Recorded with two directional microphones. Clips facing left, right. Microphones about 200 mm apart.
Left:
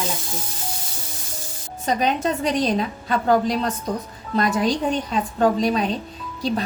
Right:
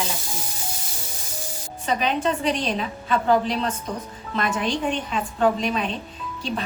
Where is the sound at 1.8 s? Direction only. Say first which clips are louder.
Left 2 dB; 40° left (ahead or behind).